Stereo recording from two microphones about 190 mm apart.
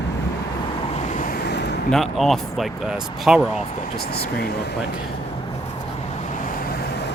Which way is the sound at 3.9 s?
55° left (ahead or behind).